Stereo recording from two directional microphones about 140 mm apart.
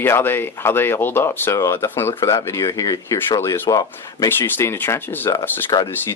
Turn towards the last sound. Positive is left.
turn(degrees=30)  # may be behind; listen again after turning